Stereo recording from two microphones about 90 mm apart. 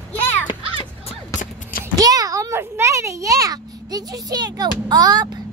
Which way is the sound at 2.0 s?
40° right (ahead or behind).